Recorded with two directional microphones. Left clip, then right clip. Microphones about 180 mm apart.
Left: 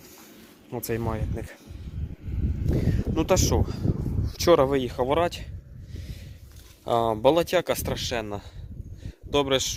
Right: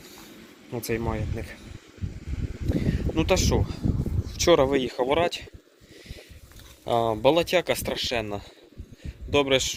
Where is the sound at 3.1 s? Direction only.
30° left (ahead or behind).